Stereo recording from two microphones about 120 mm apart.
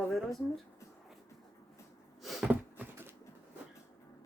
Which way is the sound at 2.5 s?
15° right (ahead or behind).